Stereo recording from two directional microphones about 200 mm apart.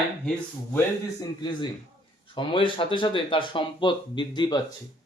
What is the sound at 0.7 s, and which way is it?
Speech, 20° left (ahead or behind).